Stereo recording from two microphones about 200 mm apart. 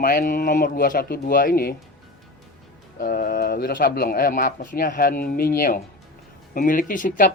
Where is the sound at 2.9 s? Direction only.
45° left (ahead or behind).